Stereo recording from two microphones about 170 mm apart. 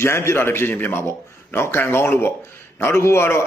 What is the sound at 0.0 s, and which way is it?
A man's voice, 15° left (ahead or behind).